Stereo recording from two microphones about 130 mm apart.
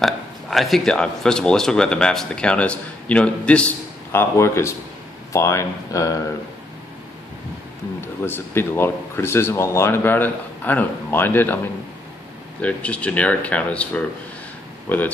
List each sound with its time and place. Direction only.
0.0 s speech: centre (ahead or behind); by 6.2 s 25° left (ahead or behind)
8.0 s speech: 15° left (ahead or behind)
12.6 s speech: 10° left (ahead or behind)